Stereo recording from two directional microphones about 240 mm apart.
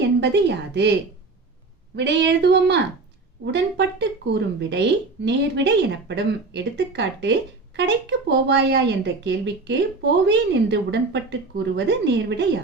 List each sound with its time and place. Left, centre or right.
0.0 s a woman's voice: right
2.0 s speech: right